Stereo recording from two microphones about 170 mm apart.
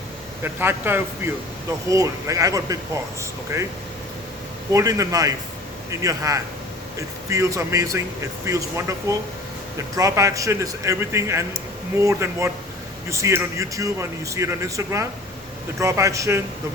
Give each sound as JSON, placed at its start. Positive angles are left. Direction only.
{"t": 0.4, "sound": "speech", "side_deg": -15}
{"t": 4.7, "sound": "speech", "side_deg": -20}